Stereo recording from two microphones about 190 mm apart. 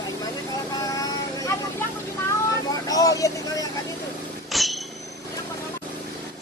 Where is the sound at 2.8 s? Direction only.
20° left (ahead or behind).